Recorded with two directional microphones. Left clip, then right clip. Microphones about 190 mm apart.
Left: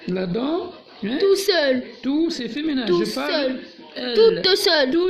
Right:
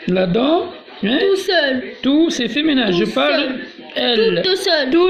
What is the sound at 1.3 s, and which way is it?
Speech, 70° left (ahead or behind).